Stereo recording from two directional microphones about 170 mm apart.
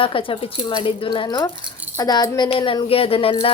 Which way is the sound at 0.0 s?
30° left (ahead or behind).